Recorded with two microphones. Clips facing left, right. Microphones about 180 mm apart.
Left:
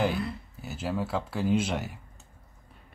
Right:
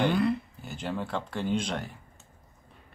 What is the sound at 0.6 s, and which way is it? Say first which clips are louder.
Speech: left 2 dB; 5° left (ahead or behind).